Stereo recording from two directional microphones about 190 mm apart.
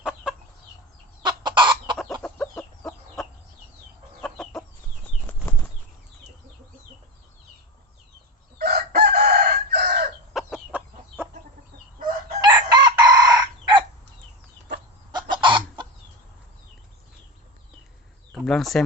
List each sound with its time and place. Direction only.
0.0 s chicken: 5° right (ahead or behind)
1.2 s chicken: 25° right (ahead or behind)
2.2 s chicken: 5° left (ahead or behind)
8.5 s chicken: 55° right (ahead or behind)
10.3 s chicken: 5° right (ahead or behind)
12.4 s chicken: 20° right (ahead or behind)
15.1 s chicken: 25° right (ahead or behind)
18.3 s a sound: 5° left (ahead or behind)